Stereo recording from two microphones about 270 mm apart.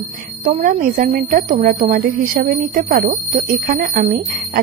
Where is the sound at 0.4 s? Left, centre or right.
Right.